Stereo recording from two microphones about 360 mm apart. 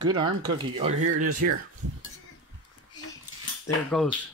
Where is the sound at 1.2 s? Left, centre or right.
Right.